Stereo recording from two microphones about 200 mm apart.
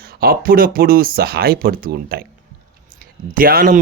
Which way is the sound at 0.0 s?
50° right (ahead or behind).